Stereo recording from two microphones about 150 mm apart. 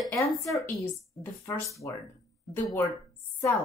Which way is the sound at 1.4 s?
20° left (ahead or behind).